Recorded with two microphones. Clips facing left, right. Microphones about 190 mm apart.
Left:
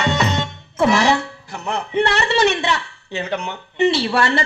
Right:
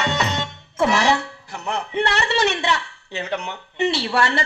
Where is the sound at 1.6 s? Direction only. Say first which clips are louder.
Left 3 dB; 45° left (ahead or behind).